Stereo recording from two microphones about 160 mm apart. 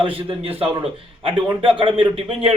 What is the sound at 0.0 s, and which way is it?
A man's voice, 35° right (ahead or behind).